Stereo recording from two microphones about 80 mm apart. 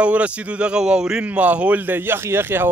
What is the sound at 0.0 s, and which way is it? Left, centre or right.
Speech, centre.